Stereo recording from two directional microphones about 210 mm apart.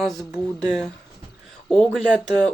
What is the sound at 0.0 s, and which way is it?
Speech, centre (ahead or behind).